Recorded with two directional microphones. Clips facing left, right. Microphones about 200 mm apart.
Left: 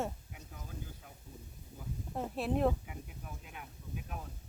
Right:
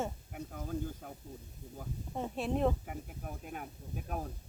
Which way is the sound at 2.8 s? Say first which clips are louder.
Right 5 dB; 50° right (ahead or behind).